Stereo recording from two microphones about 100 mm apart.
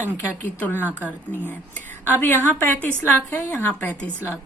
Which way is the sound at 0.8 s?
15° right (ahead or behind).